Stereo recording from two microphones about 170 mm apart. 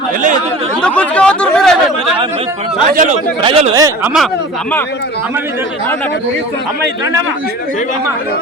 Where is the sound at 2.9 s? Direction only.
50° right (ahead or behind).